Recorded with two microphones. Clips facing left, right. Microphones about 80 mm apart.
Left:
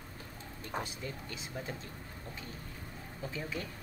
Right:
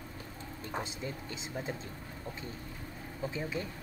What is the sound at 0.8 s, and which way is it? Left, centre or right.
Speech, right.